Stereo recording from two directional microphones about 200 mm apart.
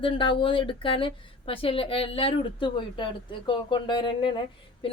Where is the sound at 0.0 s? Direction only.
25° left (ahead or behind).